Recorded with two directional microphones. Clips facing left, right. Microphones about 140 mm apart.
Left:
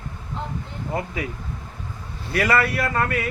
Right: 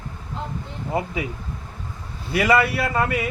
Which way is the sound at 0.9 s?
15° right (ahead or behind).